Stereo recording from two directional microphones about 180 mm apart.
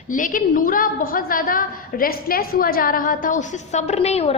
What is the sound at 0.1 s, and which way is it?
A woman's voice, 45° left (ahead or behind).